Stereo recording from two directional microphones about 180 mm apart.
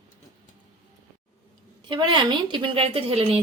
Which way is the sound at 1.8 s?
25° right (ahead or behind).